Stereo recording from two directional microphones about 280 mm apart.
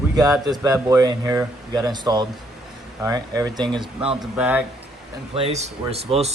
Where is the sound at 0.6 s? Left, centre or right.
Centre.